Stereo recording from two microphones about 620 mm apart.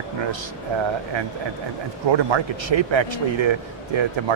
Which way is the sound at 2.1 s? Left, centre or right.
Right.